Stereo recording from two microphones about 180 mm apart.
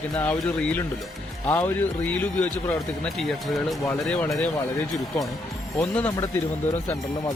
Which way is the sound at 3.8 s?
10° left (ahead or behind).